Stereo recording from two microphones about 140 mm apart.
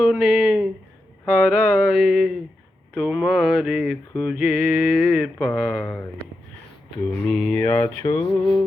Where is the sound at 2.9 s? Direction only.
Centre (ahead or behind).